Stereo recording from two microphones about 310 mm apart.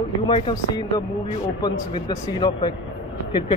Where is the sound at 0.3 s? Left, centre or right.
Centre.